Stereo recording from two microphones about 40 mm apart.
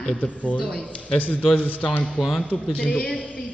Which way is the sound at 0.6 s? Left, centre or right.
Centre.